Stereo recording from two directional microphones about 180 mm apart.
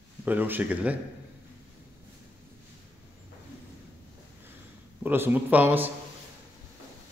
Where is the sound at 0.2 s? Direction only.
10° right (ahead or behind).